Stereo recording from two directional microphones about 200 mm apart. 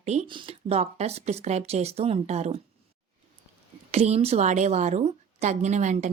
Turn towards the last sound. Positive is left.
turn(degrees=-35)  # may be behind; listen again after turning